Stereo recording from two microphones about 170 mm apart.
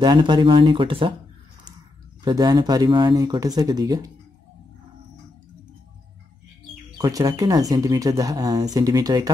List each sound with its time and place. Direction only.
0.0 s speech: 25° right (ahead or behind)
2.2 s speech: 25° right (ahead or behind)
7.0 s speech: 20° right (ahead or behind)